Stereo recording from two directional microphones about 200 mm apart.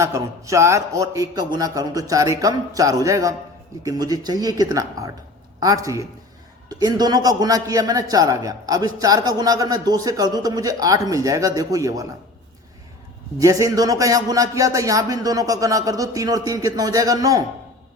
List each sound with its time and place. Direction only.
0.0 s a man's voice: 15° right (ahead or behind)
13.4 s a man's voice: 15° right (ahead or behind)